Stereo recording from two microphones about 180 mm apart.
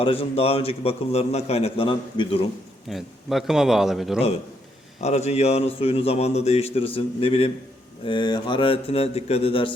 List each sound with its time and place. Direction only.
0.0 s a man's voice: 30° left (ahead or behind)
2.9 s a man's voice: centre (ahead or behind)
4.9 s a man's voice: 40° left (ahead or behind)